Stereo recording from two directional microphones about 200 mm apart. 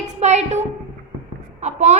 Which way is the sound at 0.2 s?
35° right (ahead or behind).